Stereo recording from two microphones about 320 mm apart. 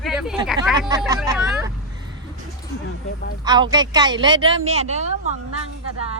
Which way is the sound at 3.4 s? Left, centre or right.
Centre.